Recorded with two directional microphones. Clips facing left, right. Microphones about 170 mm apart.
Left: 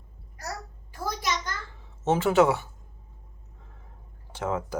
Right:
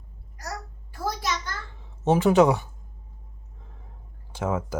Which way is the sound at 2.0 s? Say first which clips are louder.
Right 3 dB; 15° right (ahead or behind).